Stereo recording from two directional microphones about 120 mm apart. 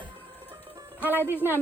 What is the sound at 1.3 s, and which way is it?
Speech, 15° right (ahead or behind).